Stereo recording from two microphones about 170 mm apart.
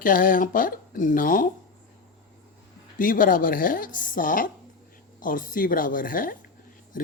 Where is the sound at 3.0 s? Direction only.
55° left (ahead or behind).